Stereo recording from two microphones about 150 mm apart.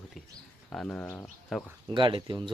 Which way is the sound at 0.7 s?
10° left (ahead or behind).